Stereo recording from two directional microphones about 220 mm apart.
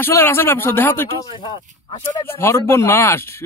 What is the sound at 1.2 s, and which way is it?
Speech, 25° left (ahead or behind).